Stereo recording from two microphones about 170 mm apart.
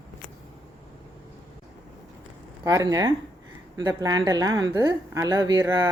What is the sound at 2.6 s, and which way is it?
Speech, 20° right (ahead or behind).